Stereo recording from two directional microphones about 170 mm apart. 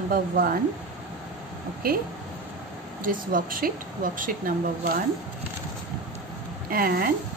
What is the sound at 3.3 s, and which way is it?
A woman's voice, 55° right (ahead or behind).